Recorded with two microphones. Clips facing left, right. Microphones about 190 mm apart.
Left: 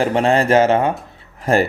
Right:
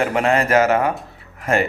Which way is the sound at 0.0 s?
30° left (ahead or behind).